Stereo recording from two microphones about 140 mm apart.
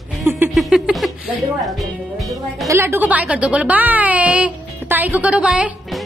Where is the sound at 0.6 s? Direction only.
5° right (ahead or behind).